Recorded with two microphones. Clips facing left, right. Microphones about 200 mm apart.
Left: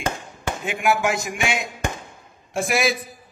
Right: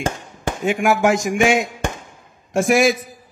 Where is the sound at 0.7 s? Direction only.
45° right (ahead or behind).